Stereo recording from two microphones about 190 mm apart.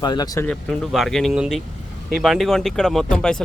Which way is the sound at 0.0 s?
20° left (ahead or behind).